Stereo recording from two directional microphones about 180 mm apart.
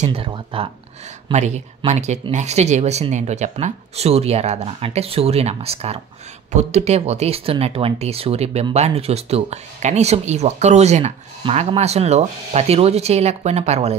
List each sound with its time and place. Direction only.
0.0 s speech: 30° right (ahead or behind)